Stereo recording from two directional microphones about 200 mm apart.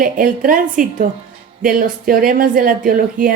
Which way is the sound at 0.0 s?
45° right (ahead or behind).